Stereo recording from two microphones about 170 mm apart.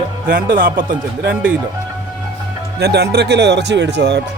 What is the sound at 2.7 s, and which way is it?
Speech, 75° right (ahead or behind).